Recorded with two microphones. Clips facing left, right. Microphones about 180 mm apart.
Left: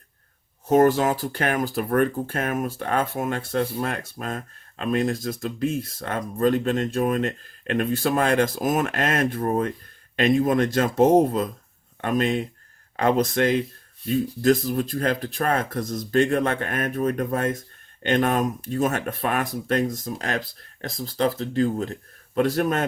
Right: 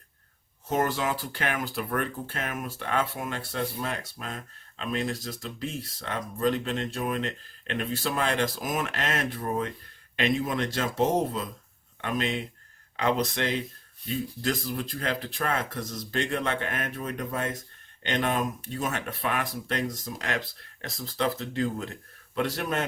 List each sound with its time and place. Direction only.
0.7 s speech: 45° left (ahead or behind)